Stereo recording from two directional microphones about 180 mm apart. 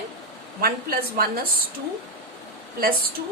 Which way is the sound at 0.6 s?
55° right (ahead or behind).